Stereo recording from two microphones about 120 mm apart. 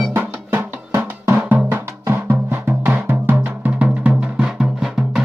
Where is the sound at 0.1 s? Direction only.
15° right (ahead or behind).